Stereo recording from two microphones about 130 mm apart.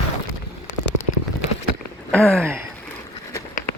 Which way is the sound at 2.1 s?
10° left (ahead or behind).